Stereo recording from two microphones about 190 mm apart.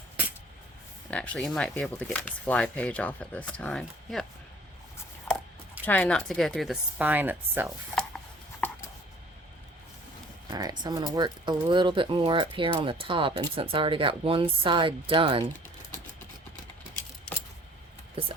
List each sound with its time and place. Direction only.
1.1 s speech: 5° left (ahead or behind)
5.8 s speech: 5° left (ahead or behind); by 7.7 s 10° right (ahead or behind)
10.5 s speech: 20° right (ahead or behind)